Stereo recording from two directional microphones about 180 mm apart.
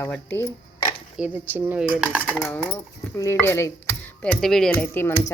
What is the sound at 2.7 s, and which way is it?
Speech, 15° left (ahead or behind).